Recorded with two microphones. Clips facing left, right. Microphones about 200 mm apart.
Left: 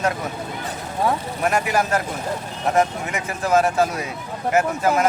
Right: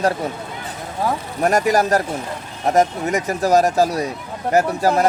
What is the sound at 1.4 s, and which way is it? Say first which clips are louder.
Speech: right 5 dB; 40° right (ahead or behind).